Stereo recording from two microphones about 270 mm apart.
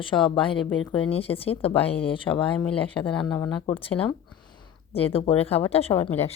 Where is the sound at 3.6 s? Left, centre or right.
Centre.